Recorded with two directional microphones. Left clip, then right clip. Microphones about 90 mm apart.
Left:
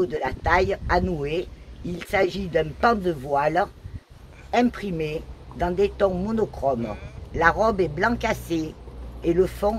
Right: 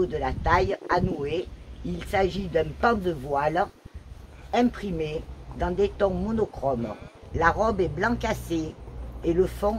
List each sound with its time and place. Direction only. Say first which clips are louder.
0.2 s a woman's voice: left 2 dB; 85° left; by 9.7 s 65° left (ahead or behind)